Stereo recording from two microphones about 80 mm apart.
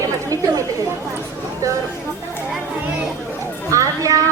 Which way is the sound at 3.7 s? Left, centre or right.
Right.